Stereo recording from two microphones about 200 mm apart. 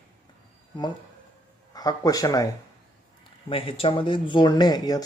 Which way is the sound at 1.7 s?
20° left (ahead or behind).